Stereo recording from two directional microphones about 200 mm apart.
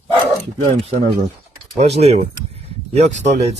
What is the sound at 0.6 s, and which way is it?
Speech, 30° right (ahead or behind).